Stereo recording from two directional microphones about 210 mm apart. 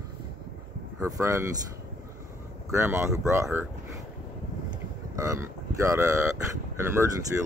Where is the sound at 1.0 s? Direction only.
15° right (ahead or behind).